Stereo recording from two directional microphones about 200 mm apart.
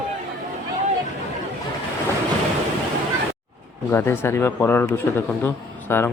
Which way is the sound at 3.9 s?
10° left (ahead or behind).